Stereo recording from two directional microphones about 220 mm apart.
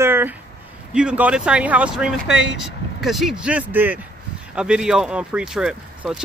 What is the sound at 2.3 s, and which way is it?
Speech, 50° left (ahead or behind).